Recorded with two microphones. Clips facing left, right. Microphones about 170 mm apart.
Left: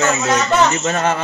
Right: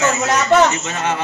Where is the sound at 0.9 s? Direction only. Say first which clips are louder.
Left 4 dB; 45° left (ahead or behind).